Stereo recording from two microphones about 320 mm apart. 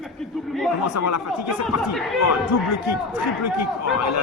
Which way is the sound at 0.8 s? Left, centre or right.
Left.